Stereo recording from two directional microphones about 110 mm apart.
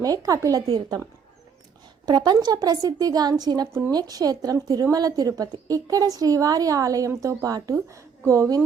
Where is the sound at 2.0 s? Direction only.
40° right (ahead or behind).